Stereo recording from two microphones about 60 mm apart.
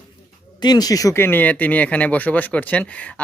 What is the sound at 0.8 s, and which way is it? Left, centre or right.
Speech, left.